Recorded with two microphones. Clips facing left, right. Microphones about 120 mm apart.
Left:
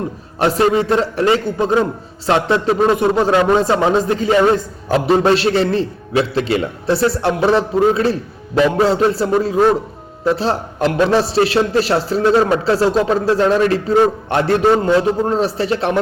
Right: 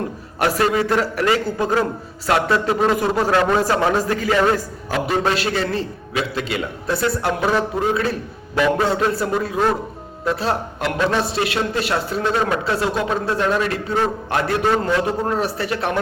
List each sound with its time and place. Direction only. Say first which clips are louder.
0.3 s a man's voice: left 4 dB; 25° left (ahead or behind)
14.3 s a man's voice: left 5 dB; 30° left (ahead or behind)